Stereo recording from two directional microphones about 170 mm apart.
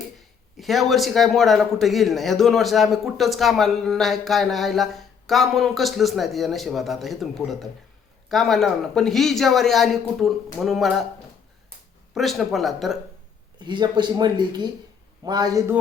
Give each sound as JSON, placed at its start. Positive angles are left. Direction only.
{"t": 0.2, "sound": "a man's voice", "side_deg": 0}
{"t": 12.1, "sound": "a man's voice", "side_deg": 0}
{"t": 13.6, "sound": "speech", "side_deg": -25}